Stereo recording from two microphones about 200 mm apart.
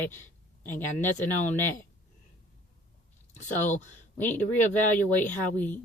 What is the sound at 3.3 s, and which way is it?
Speech, 40° left (ahead or behind).